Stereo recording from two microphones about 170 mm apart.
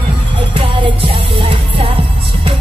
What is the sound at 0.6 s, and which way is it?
Music, 30° right (ahead or behind).